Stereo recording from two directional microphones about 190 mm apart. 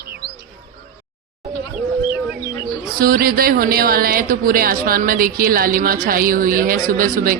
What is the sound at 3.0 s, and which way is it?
A woman's voice, 50° right (ahead or behind).